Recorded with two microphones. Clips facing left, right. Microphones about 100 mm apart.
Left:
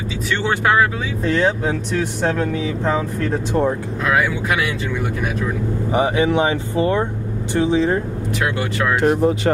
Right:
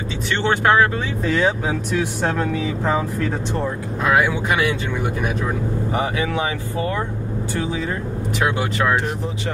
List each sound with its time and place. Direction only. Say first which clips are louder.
0.3 s speech: right 1 dB; centre (ahead or behind)
5.9 s speech: left 7 dB; 20° left (ahead or behind)
8.5 s speech: even; 5° right (ahead or behind)